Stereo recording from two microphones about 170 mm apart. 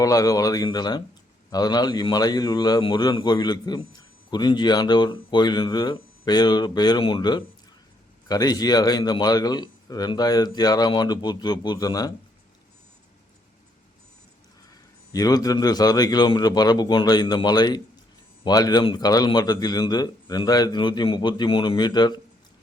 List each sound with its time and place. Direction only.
0.0 s a man's voice: 20° left (ahead or behind)
15.1 s a man's voice: 20° left (ahead or behind)